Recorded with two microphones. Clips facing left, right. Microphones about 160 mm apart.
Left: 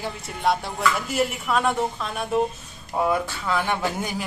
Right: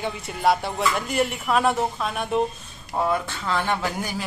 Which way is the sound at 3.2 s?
10° left (ahead or behind).